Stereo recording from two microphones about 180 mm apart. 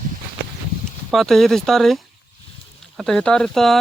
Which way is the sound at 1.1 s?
Centre (ahead or behind).